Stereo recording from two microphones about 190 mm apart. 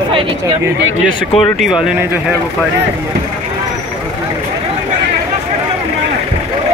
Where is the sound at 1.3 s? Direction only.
Centre (ahead or behind).